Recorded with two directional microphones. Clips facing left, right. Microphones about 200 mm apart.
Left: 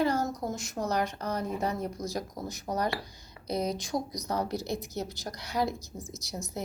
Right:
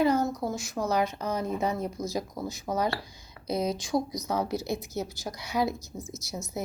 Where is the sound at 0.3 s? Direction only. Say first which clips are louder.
Right 2 dB; 20° left (ahead or behind).